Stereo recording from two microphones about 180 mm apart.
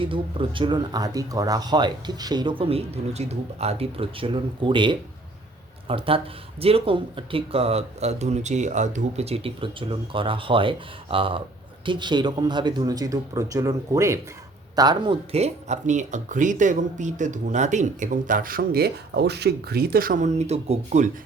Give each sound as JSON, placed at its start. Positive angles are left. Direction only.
{"t": 0.0, "sound": "speech", "side_deg": -30}